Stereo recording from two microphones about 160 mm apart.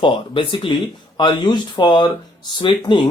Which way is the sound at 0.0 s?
30° left (ahead or behind).